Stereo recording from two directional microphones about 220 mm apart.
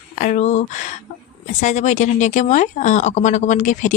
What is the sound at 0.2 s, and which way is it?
A woman's voice, 35° left (ahead or behind).